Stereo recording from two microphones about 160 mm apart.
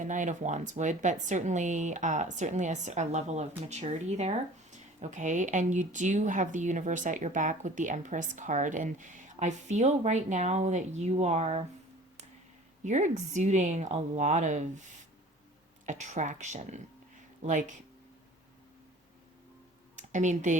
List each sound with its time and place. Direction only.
0.0 s a woman's voice: 50° right (ahead or behind)
12.8 s a woman's voice: 50° right (ahead or behind)
15.9 s a woman's voice: 50° right (ahead or behind)
20.0 s speech: 50° right (ahead or behind)